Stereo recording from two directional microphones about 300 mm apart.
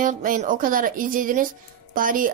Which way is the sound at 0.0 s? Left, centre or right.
Right.